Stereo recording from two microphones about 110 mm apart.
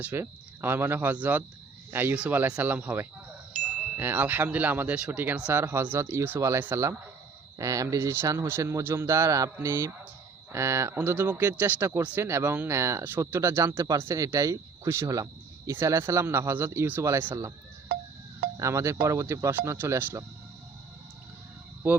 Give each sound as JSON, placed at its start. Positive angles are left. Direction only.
{"t": 0.0, "sound": "speech", "side_deg": -20}
{"t": 18.5, "sound": "speech", "side_deg": -25}